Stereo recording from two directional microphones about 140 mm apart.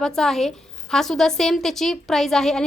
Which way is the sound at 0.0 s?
Centre (ahead or behind).